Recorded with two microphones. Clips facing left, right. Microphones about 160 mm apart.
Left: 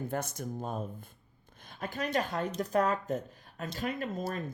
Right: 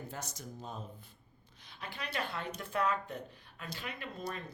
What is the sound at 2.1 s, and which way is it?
Speech, 40° left (ahead or behind).